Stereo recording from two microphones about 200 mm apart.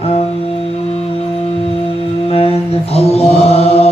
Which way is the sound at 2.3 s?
30° left (ahead or behind).